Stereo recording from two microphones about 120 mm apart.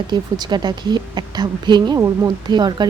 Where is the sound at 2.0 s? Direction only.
25° right (ahead or behind).